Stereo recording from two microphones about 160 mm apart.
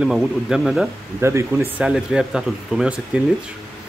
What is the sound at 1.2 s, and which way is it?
Speech, 15° right (ahead or behind).